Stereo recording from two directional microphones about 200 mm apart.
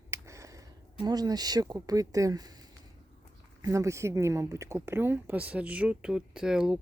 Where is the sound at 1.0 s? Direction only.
20° right (ahead or behind).